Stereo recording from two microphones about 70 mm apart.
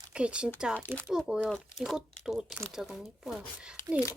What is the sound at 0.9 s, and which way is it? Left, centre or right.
Speech, right.